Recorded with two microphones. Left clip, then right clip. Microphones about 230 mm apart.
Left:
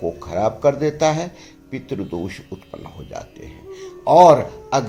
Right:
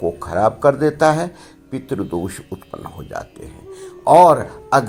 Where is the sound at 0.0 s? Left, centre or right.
Right.